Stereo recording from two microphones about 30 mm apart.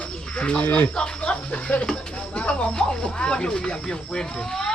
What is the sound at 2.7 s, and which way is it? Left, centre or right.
Speech, left.